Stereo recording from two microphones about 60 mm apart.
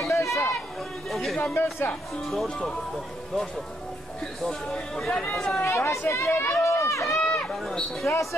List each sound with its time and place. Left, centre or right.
0.1 s a sound: left
1.1 s music: centre
1.4 s speech: left
2.2 s speech: centre
4.4 s speech: centre
5.7 s speech: left
7.1 s run: centre
7.5 s speech: centre